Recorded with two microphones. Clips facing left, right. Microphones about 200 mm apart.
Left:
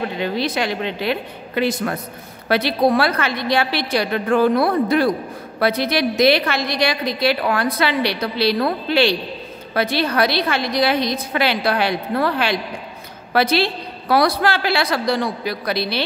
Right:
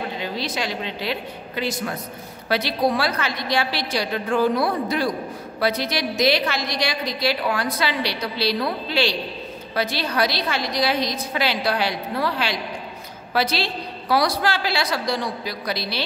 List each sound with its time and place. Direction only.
0.2 s a woman's voice: 60° left (ahead or behind)